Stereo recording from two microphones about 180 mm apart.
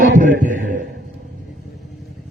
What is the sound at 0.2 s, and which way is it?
Music, 45° right (ahead or behind).